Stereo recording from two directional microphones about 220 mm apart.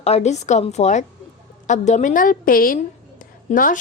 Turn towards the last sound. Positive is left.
turn(degrees=40)  # may be behind; listen again after turning